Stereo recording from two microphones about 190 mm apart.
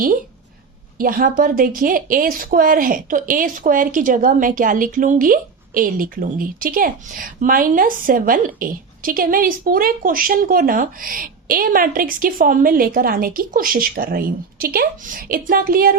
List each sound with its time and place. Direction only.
0.9 s speech: 50° right (ahead or behind)